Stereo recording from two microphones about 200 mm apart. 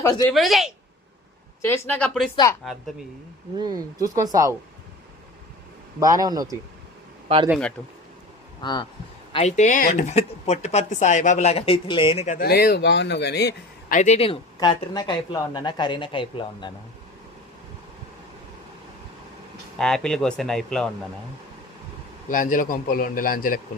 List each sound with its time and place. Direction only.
0.0 s a woman's voice: 15° left (ahead or behind)
0.3 s speech: centre (ahead or behind)
1.6 s a woman's voice: 10° left (ahead or behind)
3.6 s speech: 20° right (ahead or behind)
6.0 s speech: 15° right (ahead or behind)
7.8 s a woman's voice: 10° left (ahead or behind)
8.6 s speech: 20° left (ahead or behind)
9.3 s speech: 35° left (ahead or behind)
12.5 s speech: 50° left (ahead or behind)
13.9 s speech: 35° left (ahead or behind)
19.8 s speech: 5° left (ahead or behind)
22.3 s a man's voice: 40° left (ahead or behind)